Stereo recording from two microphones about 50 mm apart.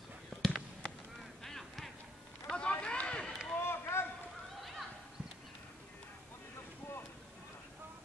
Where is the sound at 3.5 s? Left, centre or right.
Left.